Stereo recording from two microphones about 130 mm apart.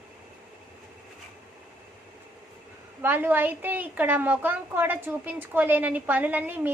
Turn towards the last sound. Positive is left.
turn(degrees=-15)  # may be behind; listen again after turning